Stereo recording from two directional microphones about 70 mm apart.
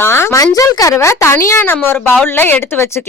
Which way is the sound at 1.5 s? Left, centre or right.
Left.